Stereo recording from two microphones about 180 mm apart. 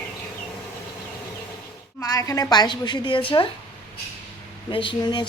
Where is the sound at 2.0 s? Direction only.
20° left (ahead or behind).